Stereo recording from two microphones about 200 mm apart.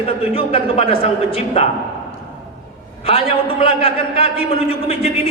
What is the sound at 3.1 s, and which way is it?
A man's voice, 30° left (ahead or behind).